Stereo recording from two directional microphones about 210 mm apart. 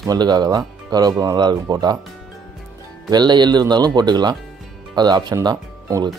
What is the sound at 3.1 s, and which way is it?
Speech, 20° right (ahead or behind).